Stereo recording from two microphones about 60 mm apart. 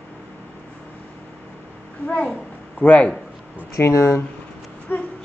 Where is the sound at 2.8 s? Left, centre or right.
Left.